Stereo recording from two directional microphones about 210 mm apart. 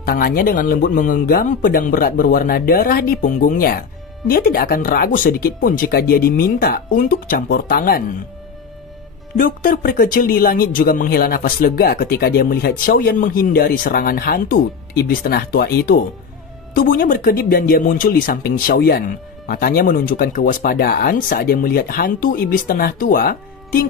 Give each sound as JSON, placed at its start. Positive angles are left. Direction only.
{"t": 0.0, "sound": "speech", "side_deg": 45}
{"t": 9.4, "sound": "speech", "side_deg": 45}